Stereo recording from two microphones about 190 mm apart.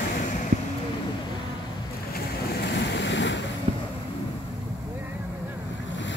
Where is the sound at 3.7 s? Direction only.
30° right (ahead or behind).